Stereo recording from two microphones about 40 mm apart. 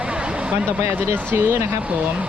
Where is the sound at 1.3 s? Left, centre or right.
Right.